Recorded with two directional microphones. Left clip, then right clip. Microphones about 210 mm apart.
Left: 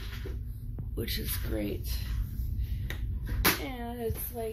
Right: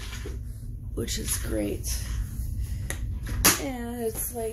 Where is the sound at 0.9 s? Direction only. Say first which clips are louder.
Right 4 dB; 20° right (ahead or behind).